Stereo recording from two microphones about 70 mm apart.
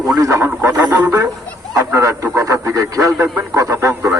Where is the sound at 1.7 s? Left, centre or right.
Right.